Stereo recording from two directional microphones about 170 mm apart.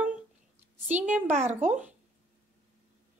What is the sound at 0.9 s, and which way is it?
Speech, 10° right (ahead or behind).